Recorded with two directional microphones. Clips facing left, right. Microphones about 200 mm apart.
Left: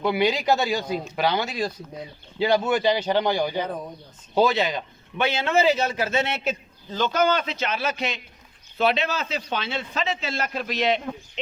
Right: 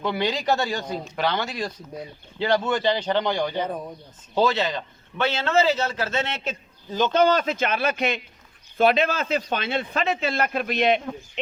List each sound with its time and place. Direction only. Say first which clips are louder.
0.0 s a man's voice: left 3 dB; 10° left (ahead or behind)
7.1 s a man's voice: right 3 dB; 35° right (ahead or behind); by 11.0 s 55° right (ahead or behind)